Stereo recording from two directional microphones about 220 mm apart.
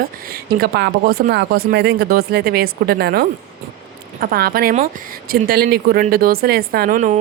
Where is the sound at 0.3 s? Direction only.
45° right (ahead or behind).